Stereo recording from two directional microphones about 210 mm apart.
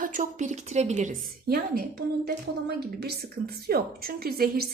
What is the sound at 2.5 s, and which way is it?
Speech, 55° right (ahead or behind).